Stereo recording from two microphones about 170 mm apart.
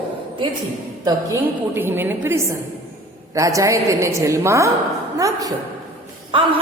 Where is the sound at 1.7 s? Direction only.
10° right (ahead or behind).